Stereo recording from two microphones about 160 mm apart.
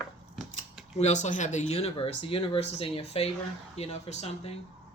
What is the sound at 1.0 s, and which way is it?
Speech, 45° left (ahead or behind).